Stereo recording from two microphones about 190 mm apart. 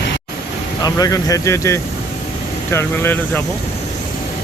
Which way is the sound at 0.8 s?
20° left (ahead or behind).